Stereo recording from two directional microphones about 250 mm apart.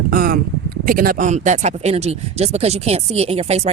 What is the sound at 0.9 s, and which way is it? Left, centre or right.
Speech, right.